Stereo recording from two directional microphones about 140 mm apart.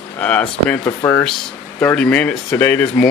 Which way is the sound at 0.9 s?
20° left (ahead or behind).